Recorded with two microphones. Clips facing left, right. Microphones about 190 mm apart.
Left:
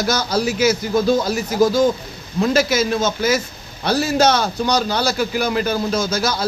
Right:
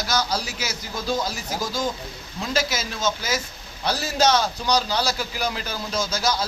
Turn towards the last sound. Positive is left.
turn(degrees=60)  # may be behind; listen again after turning